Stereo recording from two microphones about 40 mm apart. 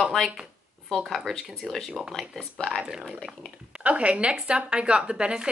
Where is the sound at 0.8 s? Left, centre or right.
Centre.